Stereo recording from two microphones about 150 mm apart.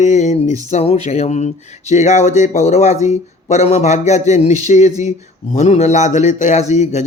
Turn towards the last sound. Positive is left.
turn(degrees=50)  # may be behind; listen again after turning